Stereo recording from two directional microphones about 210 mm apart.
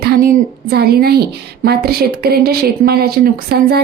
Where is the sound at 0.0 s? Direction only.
50° right (ahead or behind).